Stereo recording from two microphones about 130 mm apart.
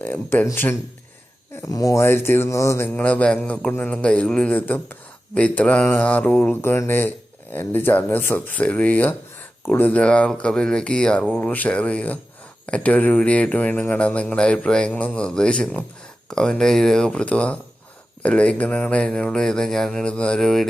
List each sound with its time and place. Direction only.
0.0 s a man's voice: 15° left (ahead or behind)